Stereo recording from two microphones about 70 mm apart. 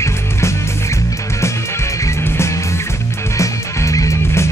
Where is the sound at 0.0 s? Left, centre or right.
Left.